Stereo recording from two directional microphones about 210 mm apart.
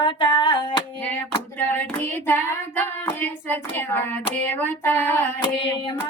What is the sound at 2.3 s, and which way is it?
Hands, 10° left (ahead or behind).